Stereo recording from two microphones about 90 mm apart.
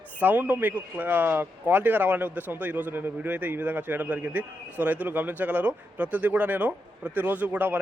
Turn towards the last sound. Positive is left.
turn(degrees=-15)  # may be behind; listen again after turning